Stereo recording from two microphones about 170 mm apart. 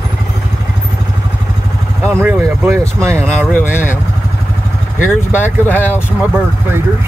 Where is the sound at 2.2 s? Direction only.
15° right (ahead or behind).